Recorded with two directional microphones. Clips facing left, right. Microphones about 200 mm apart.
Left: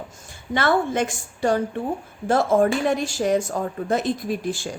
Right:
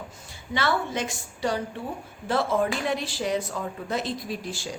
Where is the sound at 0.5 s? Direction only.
50° left (ahead or behind).